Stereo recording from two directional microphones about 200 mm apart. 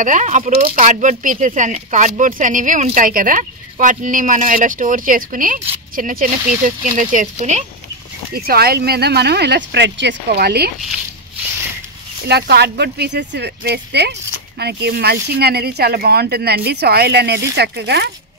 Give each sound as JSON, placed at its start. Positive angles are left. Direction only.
{"t": 0.0, "sound": "speech", "side_deg": -40}
{"t": 0.7, "sound": "speech", "side_deg": -40}
{"t": 8.3, "sound": "speech", "side_deg": -50}
{"t": 12.3, "sound": "speech", "side_deg": -55}